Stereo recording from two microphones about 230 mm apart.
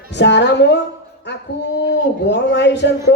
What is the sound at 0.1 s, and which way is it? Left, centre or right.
Speech, left.